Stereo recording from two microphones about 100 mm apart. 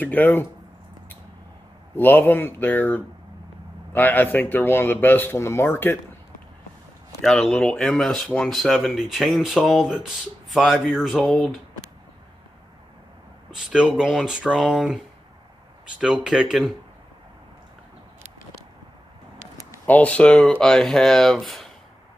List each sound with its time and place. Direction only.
0.0 s speech: 20° left (ahead or behind)
2.0 s speech: 20° left (ahead or behind)
7.2 s speech: 5° left (ahead or behind)
13.5 s speech: 5° right (ahead or behind)
16.0 s speech: 10° right (ahead or behind)
19.9 s speech: 15° left (ahead or behind)